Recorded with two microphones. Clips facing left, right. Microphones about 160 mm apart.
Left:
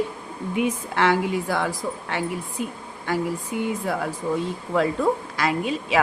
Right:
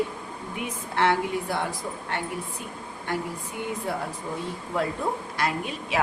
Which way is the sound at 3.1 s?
90° left.